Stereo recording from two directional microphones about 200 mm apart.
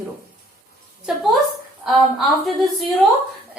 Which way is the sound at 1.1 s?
5° right (ahead or behind).